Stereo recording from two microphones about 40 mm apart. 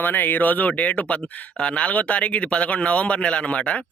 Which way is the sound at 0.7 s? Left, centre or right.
Left.